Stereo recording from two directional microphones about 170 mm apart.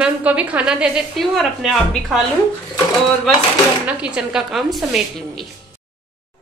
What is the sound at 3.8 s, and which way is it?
A woman's voice, 5° right (ahead or behind).